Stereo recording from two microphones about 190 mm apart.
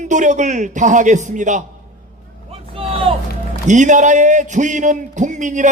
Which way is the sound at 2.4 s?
30° right (ahead or behind).